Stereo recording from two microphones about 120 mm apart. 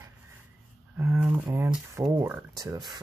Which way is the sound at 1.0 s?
20° right (ahead or behind).